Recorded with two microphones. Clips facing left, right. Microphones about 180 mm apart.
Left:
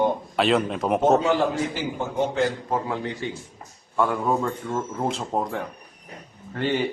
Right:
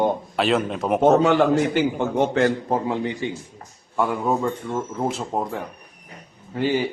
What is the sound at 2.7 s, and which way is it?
Speech, 20° right (ahead or behind).